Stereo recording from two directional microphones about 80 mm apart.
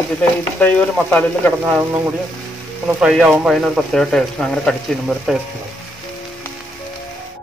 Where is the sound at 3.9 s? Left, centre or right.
Centre.